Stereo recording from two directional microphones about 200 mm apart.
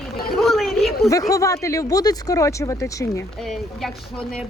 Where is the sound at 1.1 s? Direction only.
15° left (ahead or behind).